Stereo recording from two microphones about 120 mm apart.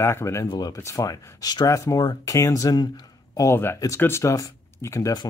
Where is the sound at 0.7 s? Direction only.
25° left (ahead or behind).